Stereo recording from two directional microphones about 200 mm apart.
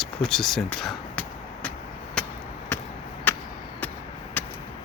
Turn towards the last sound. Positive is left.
turn(degrees=10)  # may be behind; listen again after turning